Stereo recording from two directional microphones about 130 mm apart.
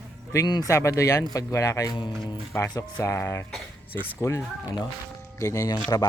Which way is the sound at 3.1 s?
20° left (ahead or behind).